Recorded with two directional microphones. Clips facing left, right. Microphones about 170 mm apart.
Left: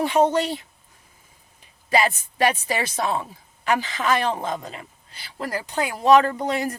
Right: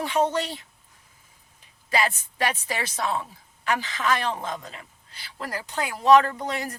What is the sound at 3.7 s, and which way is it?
Speech, 5° left (ahead or behind).